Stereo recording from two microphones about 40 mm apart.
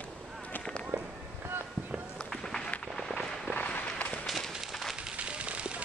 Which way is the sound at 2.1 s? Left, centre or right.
Centre.